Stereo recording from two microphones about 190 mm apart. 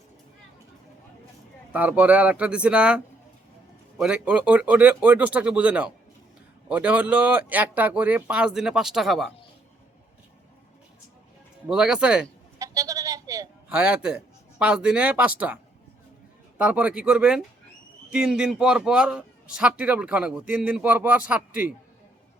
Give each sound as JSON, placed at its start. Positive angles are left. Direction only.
{"t": 1.7, "sound": "speech", "side_deg": -5}
{"t": 11.7, "sound": "a man's voice", "side_deg": -5}
{"t": 12.5, "sound": "a sound", "side_deg": -15}
{"t": 13.7, "sound": "a man's voice", "side_deg": -5}
{"t": 16.6, "sound": "a man's voice", "side_deg": -5}